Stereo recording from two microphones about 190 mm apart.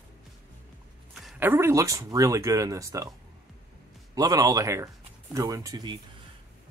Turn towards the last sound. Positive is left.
turn(degrees=-20)  # may be behind; listen again after turning